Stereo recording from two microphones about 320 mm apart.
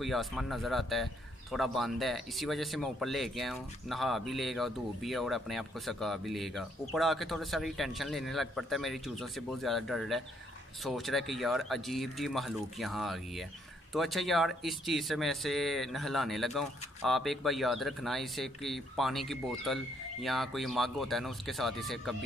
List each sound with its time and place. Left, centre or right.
0.0 s speech: centre